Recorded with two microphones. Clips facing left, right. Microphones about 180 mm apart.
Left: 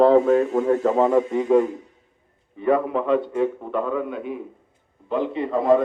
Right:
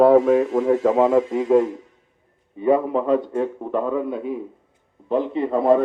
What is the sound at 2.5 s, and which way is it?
Speech, 20° right (ahead or behind).